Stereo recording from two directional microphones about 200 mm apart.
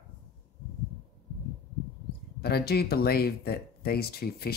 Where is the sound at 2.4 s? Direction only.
55° left (ahead or behind).